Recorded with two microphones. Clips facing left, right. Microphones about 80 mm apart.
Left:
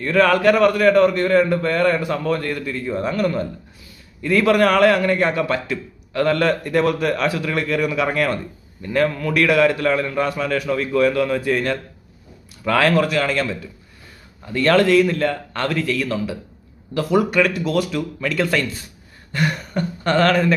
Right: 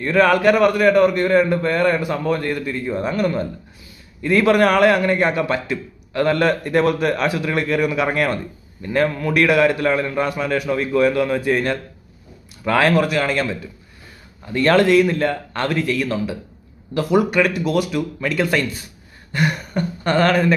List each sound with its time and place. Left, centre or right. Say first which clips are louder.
0.0 s a man's voice: right 1 dB; right